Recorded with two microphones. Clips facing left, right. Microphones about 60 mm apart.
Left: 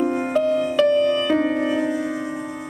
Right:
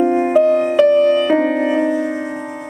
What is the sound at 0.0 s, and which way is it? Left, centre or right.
Music, centre.